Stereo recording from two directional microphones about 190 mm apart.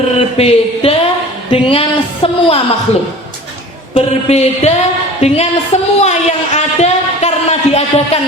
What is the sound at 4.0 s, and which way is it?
Mantra, 35° left (ahead or behind).